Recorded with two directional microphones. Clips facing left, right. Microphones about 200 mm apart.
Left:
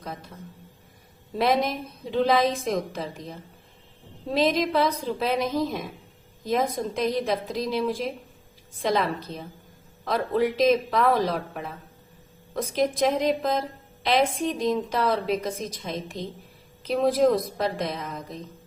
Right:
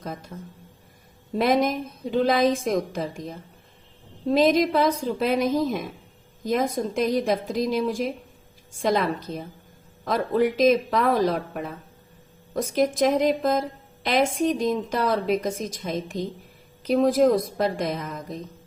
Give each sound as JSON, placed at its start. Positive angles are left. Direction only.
{"t": 0.0, "sound": "a man's voice", "side_deg": -45}
{"t": 1.4, "sound": "a woman's voice", "side_deg": -50}
{"t": 4.4, "sound": "a woman's voice", "side_deg": -45}
{"t": 12.6, "sound": "a woman's voice", "side_deg": -45}